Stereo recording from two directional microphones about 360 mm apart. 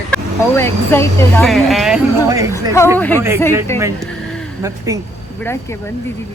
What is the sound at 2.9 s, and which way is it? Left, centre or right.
Speech, centre.